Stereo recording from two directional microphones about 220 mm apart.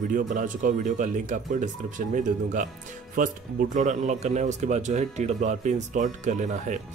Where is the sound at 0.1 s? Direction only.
35° right (ahead or behind).